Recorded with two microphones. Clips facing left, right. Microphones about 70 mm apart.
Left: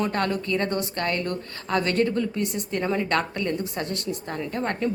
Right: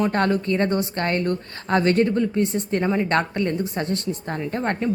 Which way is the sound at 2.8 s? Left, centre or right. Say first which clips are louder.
Right 2 dB; centre.